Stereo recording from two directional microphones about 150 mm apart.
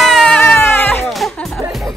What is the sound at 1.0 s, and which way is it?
Speech, centre (ahead or behind).